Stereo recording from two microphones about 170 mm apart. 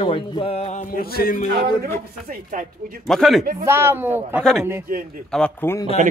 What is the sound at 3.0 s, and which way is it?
Speech, centre (ahead or behind).